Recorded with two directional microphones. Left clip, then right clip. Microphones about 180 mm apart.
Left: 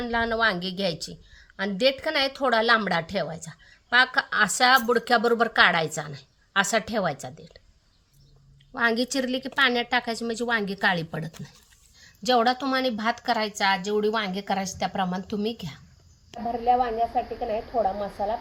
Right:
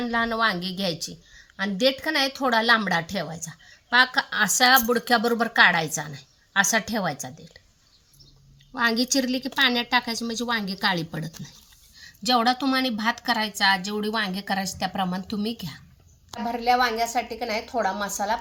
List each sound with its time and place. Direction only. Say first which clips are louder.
0.0 s a woman's voice: even; 25° left (ahead or behind)
8.7 s a woman's voice: right 1 dB; 30° left (ahead or behind)
16.3 s a woman's voice: even; 20° right (ahead or behind)